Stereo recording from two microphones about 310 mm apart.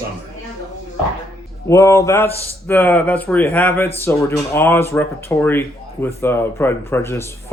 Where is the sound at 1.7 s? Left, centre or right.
Centre.